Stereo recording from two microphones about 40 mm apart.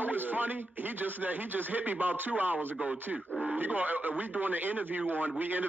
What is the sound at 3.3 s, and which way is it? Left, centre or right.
Radio, right.